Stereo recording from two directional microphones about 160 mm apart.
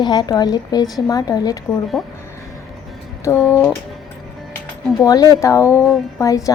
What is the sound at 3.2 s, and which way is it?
Speech, 15° left (ahead or behind).